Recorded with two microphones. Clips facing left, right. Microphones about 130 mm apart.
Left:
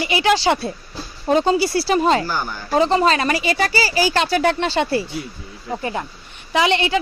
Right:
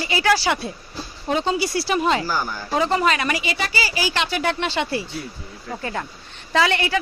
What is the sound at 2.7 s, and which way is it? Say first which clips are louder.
Speech: left 4 dB; 30° left (ahead or behind).